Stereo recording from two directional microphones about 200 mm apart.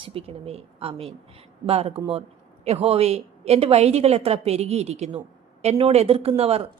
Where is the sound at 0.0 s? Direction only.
30° right (ahead or behind).